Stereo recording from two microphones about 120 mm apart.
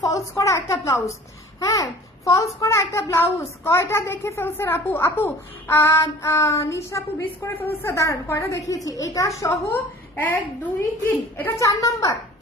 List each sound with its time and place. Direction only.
0.4 s a child's voice: 25° left (ahead or behind)
11.5 s a child's voice: 25° left (ahead or behind)